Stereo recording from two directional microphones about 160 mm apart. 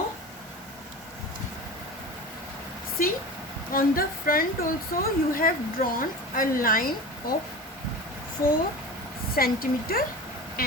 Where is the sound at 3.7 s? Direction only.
65° left (ahead or behind).